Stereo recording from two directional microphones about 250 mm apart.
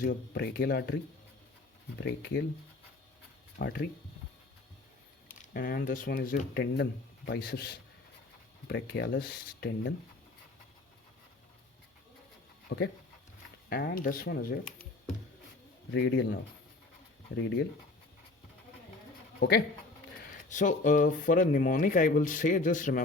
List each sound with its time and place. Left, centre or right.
0.0 s speech: left
3.6 s speech: left
5.3 s speech: left
12.6 s speech: left
19.4 s speech: left